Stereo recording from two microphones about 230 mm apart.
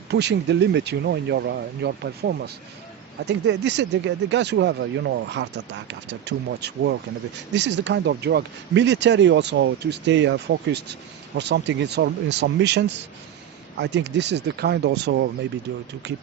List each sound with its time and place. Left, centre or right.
0.1 s speech: right